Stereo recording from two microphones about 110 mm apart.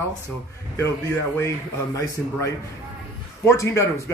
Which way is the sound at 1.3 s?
25° left (ahead or behind).